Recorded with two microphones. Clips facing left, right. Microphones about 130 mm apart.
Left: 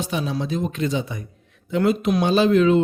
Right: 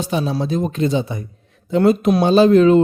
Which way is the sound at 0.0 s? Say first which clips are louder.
Right 4 dB; 35° right (ahead or behind).